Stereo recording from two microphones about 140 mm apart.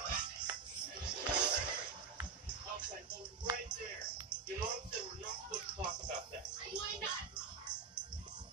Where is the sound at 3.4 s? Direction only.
30° right (ahead or behind).